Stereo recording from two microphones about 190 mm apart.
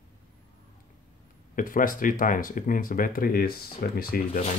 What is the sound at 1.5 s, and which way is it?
Speech, 45° left (ahead or behind).